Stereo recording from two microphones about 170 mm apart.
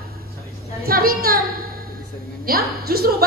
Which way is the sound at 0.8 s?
60° right (ahead or behind).